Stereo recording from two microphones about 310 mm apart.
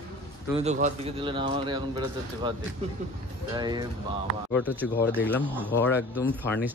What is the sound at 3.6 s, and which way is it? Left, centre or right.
Speech, centre.